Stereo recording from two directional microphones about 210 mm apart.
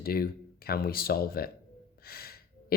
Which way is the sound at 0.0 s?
45° left (ahead or behind).